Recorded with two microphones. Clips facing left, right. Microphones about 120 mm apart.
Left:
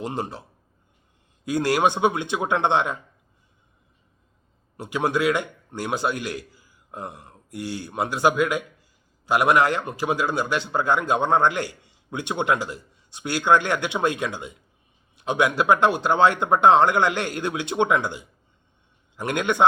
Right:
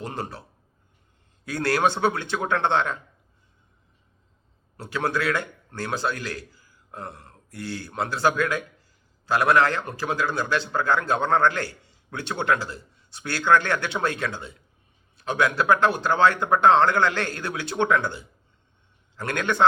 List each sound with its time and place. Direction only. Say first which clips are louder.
0.0 s speech: left 3 dB; 20° left (ahead or behind)
1.5 s a man's voice: left 2 dB; 15° left (ahead or behind)
4.8 s a man's voice: left 3 dB; 20° left (ahead or behind)